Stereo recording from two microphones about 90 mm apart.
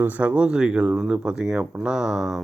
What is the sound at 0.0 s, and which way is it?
Speech, 15° right (ahead or behind).